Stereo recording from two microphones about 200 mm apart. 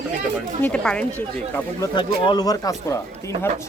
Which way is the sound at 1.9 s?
25° left (ahead or behind).